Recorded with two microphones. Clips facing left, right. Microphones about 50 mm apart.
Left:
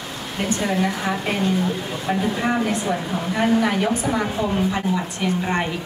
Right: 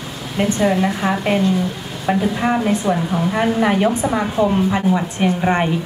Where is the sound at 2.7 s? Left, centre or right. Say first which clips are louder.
Right 5 dB; right.